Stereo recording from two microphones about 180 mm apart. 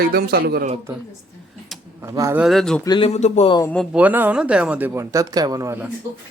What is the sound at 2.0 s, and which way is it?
Speech, 15° right (ahead or behind).